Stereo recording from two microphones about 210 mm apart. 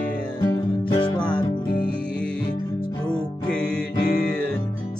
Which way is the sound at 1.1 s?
5° left (ahead or behind).